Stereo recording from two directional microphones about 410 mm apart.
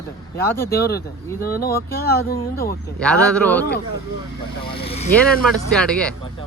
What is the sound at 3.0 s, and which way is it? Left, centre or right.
Speech, centre.